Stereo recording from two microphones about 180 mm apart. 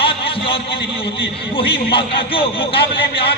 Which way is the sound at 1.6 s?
30° left (ahead or behind).